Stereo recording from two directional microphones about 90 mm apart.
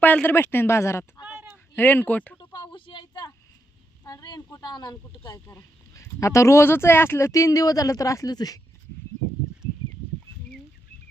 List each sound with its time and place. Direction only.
0.0 s speech: 20° left (ahead or behind)
1.2 s a sound: 20° right (ahead or behind)
1.7 s speech: 20° left (ahead or behind)
2.4 s a sound: 65° left (ahead or behind)
4.0 s a woman's voice: 50° left (ahead or behind)
5.3 s speech: 30° left (ahead or behind)